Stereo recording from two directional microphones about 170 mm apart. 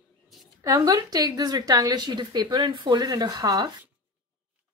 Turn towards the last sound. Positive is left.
turn(degrees=-25)  # may be behind; listen again after turning